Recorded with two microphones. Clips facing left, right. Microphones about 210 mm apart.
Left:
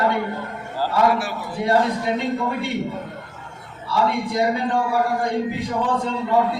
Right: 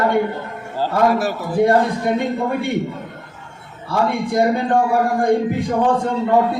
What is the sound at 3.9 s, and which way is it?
A man's voice, 50° right (ahead or behind).